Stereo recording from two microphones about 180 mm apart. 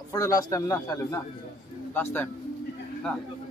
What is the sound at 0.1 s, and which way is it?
A man's voice, 20° left (ahead or behind).